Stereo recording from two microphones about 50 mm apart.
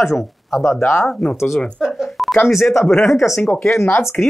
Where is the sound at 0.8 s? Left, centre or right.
Left.